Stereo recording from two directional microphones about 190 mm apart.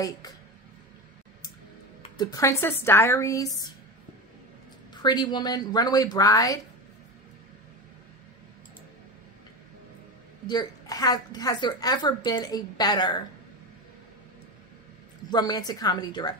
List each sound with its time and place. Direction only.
2.1 s a woman's voice: 15° left (ahead or behind)
5.0 s a woman's voice: 20° left (ahead or behind)
10.4 s a woman's voice: 20° left (ahead or behind)
15.2 s a woman's voice: 20° left (ahead or behind)